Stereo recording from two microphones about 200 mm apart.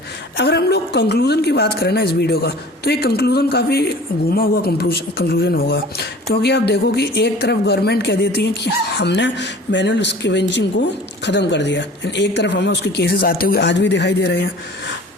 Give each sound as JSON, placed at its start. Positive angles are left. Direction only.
{"t": 0.3, "sound": "a woman's voice", "side_deg": 55}